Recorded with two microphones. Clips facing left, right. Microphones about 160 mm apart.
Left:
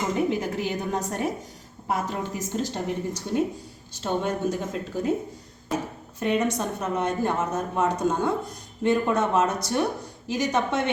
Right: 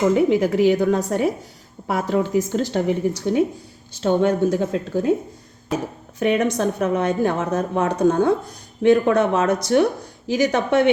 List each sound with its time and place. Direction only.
0.3 s a woman's voice: 90° right
4.0 s speech: 75° right (ahead or behind)
6.1 s a woman's voice: 80° right